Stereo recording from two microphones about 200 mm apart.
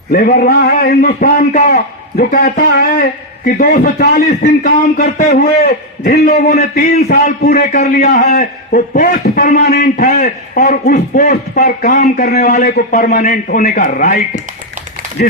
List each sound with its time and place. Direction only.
0.1 s a man's voice: 50° left (ahead or behind)
1.5 s a man's voice: 35° left (ahead or behind)